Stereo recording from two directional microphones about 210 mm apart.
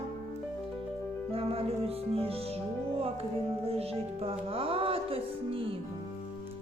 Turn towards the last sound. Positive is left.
turn(degrees=-25)  # may be behind; listen again after turning